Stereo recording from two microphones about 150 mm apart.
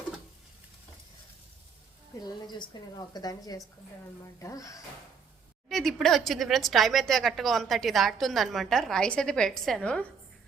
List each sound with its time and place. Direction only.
2.2 s a woman's voice: 30° left (ahead or behind)
5.6 s speech: centre (ahead or behind)